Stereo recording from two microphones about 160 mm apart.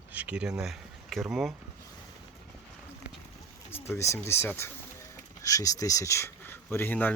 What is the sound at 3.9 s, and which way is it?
Speech, 15° left (ahead or behind).